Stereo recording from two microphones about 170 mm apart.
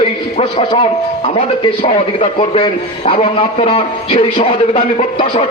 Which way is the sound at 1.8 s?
35° left (ahead or behind).